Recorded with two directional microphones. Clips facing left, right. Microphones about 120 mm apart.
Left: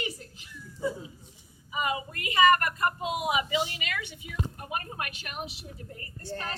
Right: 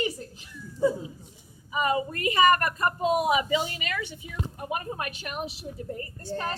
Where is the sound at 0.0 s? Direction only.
40° right (ahead or behind).